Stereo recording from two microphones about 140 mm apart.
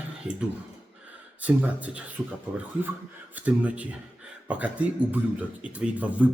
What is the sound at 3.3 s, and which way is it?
Speech, 10° right (ahead or behind).